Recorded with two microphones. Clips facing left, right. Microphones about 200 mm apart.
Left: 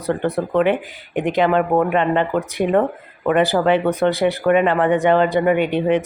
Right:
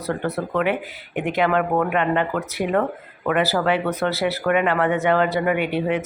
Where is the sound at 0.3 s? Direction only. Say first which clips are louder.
Left 5 dB; 15° left (ahead or behind).